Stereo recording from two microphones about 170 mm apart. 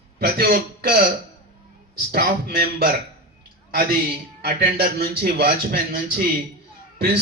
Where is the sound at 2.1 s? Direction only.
65° right (ahead or behind).